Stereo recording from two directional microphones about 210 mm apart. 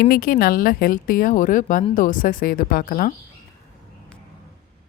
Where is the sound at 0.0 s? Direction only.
45° left (ahead or behind).